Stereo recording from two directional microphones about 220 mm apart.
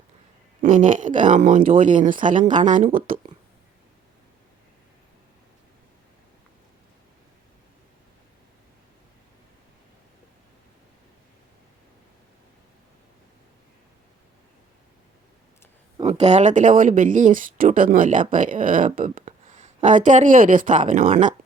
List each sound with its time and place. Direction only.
0.6 s speech: 35° right (ahead or behind)
16.0 s speech: 30° right (ahead or behind)